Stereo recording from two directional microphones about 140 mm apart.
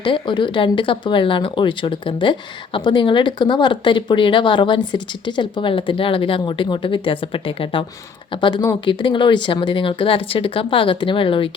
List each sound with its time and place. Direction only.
0.0 s speech: 35° left (ahead or behind)